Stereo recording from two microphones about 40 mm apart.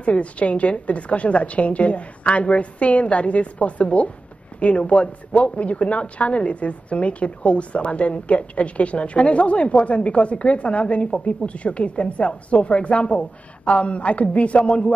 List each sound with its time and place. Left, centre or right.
0.0 s a woman's voice: left